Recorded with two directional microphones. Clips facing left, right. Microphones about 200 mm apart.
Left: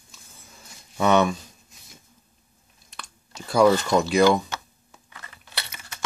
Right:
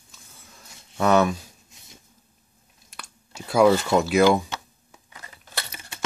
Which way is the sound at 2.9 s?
10° right (ahead or behind).